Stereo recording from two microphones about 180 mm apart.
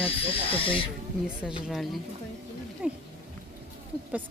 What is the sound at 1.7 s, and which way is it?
A woman's voice, centre (ahead or behind).